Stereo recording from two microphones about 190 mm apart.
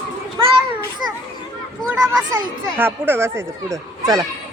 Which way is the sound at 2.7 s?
10° right (ahead or behind).